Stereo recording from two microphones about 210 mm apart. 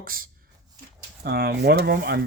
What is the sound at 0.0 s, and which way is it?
Speech, 45° right (ahead or behind).